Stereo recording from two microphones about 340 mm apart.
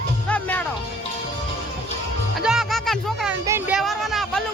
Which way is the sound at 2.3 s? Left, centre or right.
Centre.